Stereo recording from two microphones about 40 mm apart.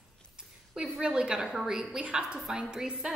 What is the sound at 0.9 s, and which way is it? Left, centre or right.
A woman's voice, right.